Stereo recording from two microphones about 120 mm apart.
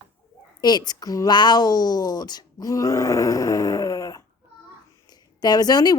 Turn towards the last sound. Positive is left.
turn(degrees=35)  # may be behind; listen again after turning